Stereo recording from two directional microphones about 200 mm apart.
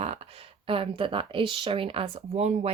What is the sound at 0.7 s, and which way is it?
Speech, 25° right (ahead or behind).